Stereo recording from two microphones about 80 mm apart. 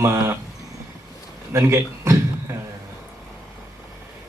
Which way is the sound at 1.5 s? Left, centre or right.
Right.